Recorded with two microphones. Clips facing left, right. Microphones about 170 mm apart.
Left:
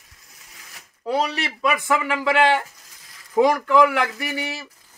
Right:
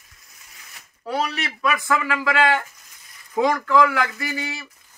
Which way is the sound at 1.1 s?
25° left (ahead or behind).